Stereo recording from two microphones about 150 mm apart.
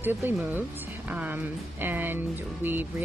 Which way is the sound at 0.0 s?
15° right (ahead or behind).